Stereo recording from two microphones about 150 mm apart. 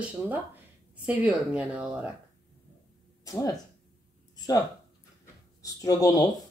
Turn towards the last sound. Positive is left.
turn(degrees=25)  # may be behind; listen again after turning